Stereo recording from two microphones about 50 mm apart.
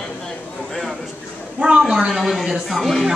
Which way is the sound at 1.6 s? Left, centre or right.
Right.